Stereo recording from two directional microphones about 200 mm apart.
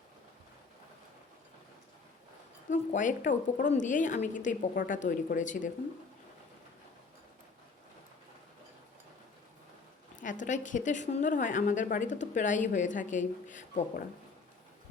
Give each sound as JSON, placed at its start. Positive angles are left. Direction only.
{"t": 2.6, "sound": "a woman's voice", "side_deg": 35}
{"t": 10.2, "sound": "a woman's voice", "side_deg": 40}